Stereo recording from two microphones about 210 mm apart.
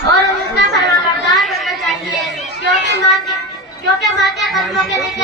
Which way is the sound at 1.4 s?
Centre (ahead or behind).